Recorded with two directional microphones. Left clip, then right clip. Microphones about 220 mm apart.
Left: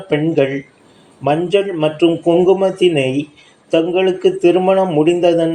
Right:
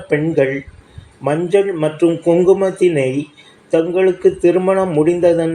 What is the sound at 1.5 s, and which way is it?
Speech, 15° left (ahead or behind).